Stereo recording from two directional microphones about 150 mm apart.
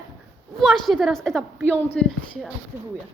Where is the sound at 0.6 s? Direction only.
Centre (ahead or behind).